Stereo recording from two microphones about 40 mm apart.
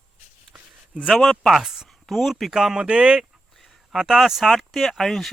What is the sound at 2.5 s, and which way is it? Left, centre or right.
Speech, centre.